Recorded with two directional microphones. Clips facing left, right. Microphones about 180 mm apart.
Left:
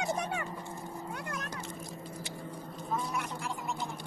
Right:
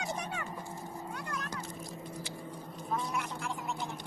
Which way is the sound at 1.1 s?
20° left (ahead or behind).